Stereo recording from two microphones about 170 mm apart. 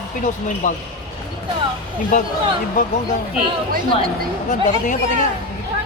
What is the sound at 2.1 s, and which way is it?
Speech, 50° left (ahead or behind).